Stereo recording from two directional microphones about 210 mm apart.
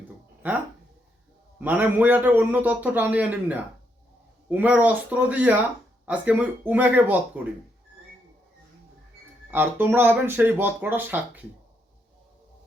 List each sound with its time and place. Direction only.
0.4 s a man's voice: 10° right (ahead or behind)
9.5 s a man's voice: 10° right (ahead or behind)